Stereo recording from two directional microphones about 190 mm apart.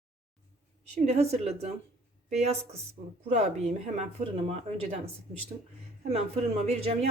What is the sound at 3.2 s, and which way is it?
Speech, 35° right (ahead or behind).